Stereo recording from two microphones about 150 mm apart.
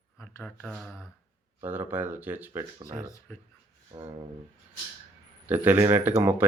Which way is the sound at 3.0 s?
20° left (ahead or behind).